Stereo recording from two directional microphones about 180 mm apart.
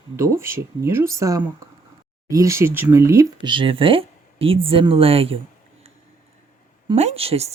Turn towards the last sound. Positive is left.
turn(degrees=-35)  # may be behind; listen again after turning